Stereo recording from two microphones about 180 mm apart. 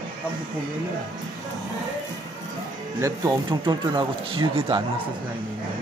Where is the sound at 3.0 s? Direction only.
25° right (ahead or behind).